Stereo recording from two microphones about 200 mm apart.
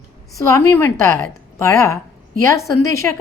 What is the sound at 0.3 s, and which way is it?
A woman's voice, 15° left (ahead or behind).